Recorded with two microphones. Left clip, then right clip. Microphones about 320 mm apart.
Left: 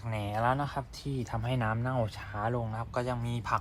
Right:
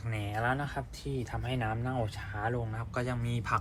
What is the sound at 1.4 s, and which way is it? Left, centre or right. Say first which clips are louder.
Speech: left 3 dB; left.